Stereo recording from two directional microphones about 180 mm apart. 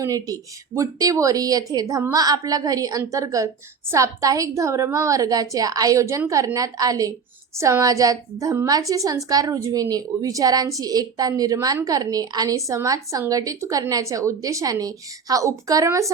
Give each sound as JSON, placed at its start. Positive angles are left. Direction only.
{"t": 0.0, "sound": "a woman's voice", "side_deg": -20}